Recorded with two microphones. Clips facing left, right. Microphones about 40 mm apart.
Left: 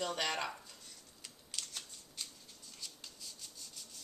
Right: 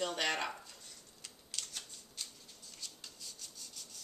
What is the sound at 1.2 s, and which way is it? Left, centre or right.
Scissors, centre.